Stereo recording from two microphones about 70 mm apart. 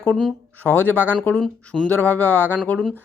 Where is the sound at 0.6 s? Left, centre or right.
Left.